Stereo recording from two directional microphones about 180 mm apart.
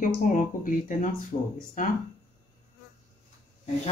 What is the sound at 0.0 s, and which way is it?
Speech, 45° left (ahead or behind).